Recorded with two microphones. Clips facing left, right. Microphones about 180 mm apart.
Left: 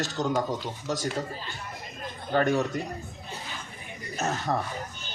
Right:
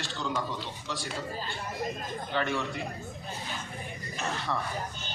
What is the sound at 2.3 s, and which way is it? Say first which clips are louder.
Speech: left 7 dB; 45° left (ahead or behind).